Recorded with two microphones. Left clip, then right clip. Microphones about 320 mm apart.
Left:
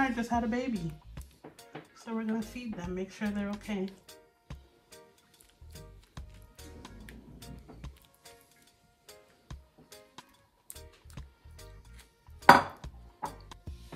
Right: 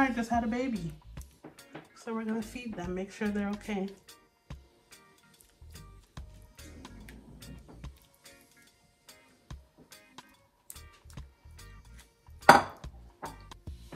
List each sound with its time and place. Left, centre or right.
0.0 s speech: centre
5.7 s music: centre